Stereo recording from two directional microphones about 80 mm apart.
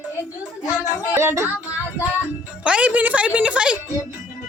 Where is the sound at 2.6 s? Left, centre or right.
Centre.